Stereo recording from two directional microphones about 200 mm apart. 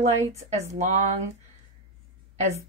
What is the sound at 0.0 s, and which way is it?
Speech, 30° right (ahead or behind).